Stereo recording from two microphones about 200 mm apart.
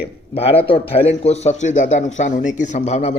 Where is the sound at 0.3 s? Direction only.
30° left (ahead or behind).